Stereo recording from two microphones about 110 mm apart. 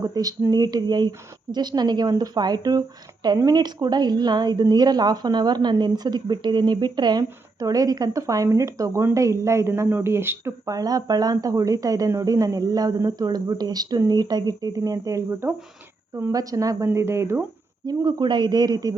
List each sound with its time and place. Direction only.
0.0 s speech: 35° right (ahead or behind)
17.8 s speech: 40° right (ahead or behind)